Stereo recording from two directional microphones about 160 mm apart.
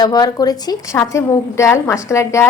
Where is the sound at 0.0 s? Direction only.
25° left (ahead or behind).